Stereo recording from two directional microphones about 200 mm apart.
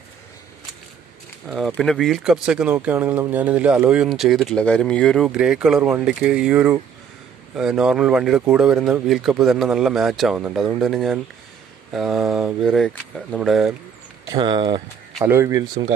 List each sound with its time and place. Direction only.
1.5 s speech: centre (ahead or behind)
14.3 s speech: 25° right (ahead or behind)
15.1 s speech: 10° right (ahead or behind)